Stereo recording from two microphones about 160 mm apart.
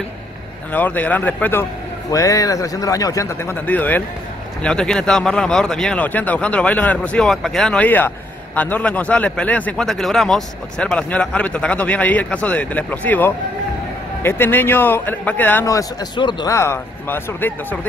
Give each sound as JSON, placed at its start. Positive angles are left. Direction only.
{"t": 0.7, "sound": "a man's voice", "side_deg": 10}